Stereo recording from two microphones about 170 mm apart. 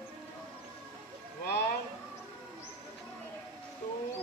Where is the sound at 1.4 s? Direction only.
70° left (ahead or behind).